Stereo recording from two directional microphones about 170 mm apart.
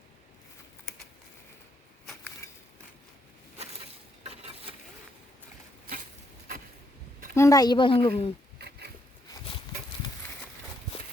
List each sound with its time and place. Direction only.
7.3 s a woman's voice: 20° left (ahead or behind); by 8.3 s 35° left (ahead or behind)
8.5 s patter: 75° right (ahead or behind)